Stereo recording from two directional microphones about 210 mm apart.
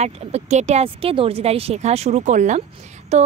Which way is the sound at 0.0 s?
30° right (ahead or behind).